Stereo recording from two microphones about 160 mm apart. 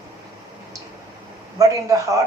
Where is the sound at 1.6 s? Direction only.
20° right (ahead or behind).